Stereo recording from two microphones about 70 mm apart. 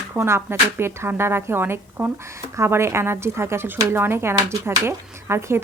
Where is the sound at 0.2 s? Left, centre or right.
Right.